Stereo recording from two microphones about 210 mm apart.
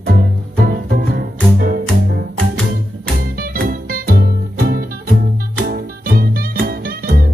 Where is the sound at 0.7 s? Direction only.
45° right (ahead or behind).